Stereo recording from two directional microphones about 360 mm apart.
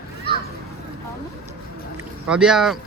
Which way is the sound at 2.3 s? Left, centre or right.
Centre.